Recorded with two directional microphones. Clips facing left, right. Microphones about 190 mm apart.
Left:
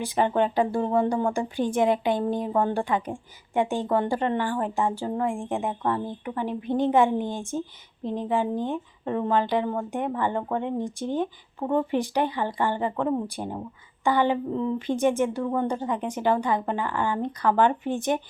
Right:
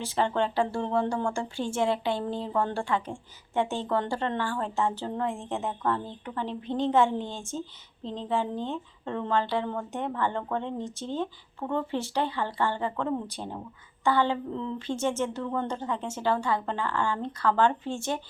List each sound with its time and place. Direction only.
0.0 s speech: 15° left (ahead or behind)